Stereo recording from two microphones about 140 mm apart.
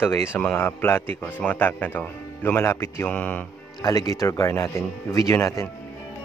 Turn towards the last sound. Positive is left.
turn(degrees=20)  # may be behind; listen again after turning